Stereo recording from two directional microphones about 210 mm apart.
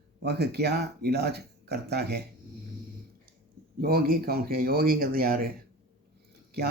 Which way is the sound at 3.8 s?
45° right (ahead or behind).